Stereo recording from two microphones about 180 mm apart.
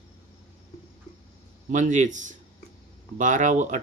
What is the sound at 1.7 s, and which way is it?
Speech, 40° right (ahead or behind).